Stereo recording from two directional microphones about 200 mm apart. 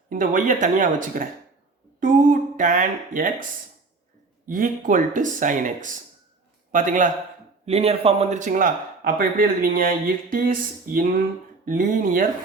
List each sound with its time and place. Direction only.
0.1 s speech: 40° right (ahead or behind)
4.4 s a man's voice: 45° right (ahead or behind)